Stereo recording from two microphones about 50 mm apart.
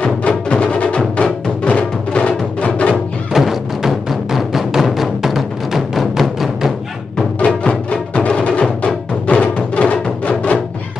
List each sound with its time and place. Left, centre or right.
0.0 s music: left
3.3 s music: centre
7.3 s music: left